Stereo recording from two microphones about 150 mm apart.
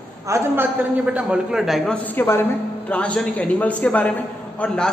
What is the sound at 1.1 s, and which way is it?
A man's voice, 10° right (ahead or behind).